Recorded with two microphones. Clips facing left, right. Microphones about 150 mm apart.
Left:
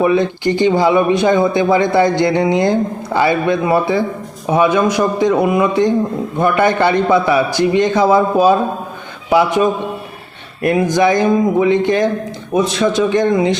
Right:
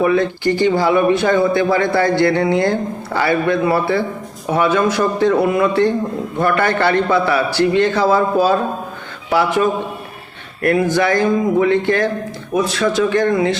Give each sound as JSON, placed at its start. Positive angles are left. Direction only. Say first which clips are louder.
{"t": 0.0, "sound": "a man's voice", "louder": "left 1 dB", "side_deg": 20}